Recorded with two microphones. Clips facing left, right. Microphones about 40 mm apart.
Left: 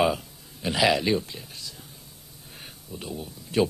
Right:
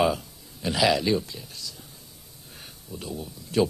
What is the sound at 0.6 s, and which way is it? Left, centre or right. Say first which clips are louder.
Speech: even; left.